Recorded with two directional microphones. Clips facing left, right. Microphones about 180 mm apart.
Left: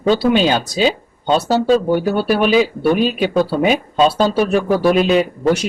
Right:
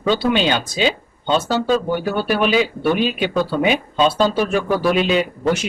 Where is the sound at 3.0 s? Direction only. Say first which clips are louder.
Left 3 dB; 40° left (ahead or behind).